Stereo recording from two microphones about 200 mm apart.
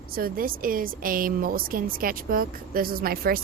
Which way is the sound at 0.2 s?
45° right (ahead or behind).